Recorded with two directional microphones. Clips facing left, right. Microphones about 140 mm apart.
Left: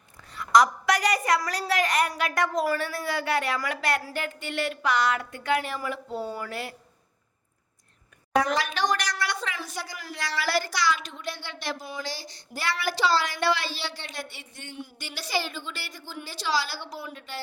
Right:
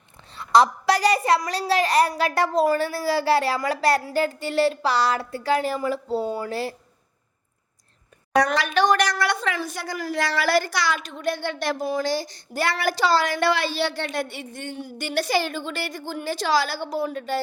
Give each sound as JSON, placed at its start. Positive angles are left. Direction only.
{"t": 0.3, "sound": "a woman's voice", "side_deg": -30}
{"t": 6.2, "sound": "speech", "side_deg": -20}
{"t": 6.5, "sound": "a woman's voice", "side_deg": -30}
{"t": 8.5, "sound": "a woman's voice", "side_deg": -65}